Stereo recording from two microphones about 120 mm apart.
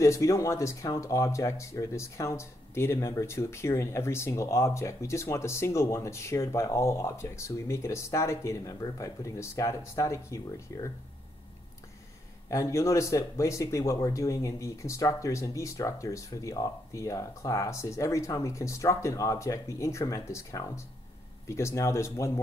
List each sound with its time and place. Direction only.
0.0 s speech: 25° left (ahead or behind)
12.4 s speech: 25° left (ahead or behind)